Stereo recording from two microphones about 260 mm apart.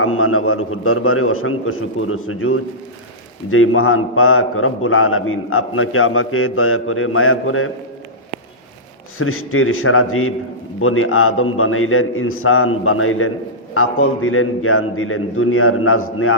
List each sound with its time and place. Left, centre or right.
0.0 s a man's voice: left
9.1 s a man's voice: left